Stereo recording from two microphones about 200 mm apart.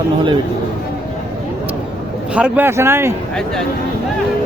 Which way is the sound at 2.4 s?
5° right (ahead or behind).